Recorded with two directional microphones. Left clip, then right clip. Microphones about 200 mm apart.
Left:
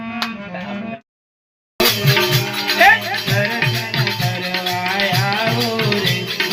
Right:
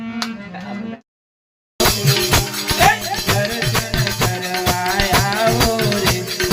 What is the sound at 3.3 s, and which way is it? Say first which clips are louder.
Music: left 1 dB; 25° right (ahead or behind).